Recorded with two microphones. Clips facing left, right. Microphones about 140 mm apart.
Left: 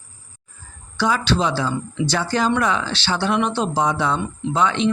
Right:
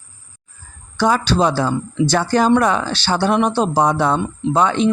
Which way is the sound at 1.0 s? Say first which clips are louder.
Right 4 dB; 45° right (ahead or behind).